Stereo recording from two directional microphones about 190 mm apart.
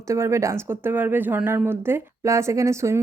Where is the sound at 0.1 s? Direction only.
15° right (ahead or behind).